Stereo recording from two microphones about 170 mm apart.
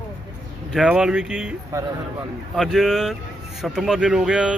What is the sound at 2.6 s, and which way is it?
A man's voice, centre (ahead or behind).